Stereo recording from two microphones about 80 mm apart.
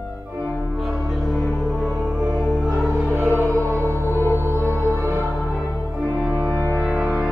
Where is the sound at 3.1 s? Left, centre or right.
Right.